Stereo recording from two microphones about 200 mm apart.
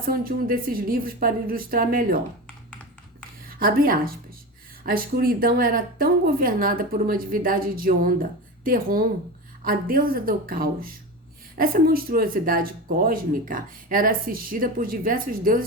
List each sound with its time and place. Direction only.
0.0 s a woman's voice: 45° right (ahead or behind)
3.4 s a woman's voice: 45° right (ahead or behind)